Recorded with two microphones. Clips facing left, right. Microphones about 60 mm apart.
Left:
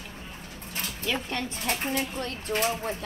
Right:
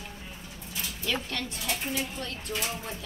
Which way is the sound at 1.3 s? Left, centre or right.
Left.